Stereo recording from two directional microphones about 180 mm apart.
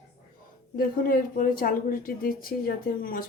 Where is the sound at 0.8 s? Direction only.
55° left (ahead or behind).